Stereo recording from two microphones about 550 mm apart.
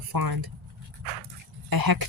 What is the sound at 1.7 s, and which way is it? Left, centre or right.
Speech, right.